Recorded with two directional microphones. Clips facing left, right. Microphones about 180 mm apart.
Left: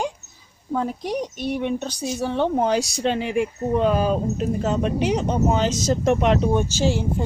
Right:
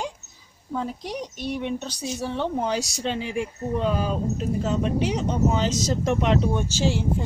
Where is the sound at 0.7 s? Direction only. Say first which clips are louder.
Left 5 dB; 55° left (ahead or behind).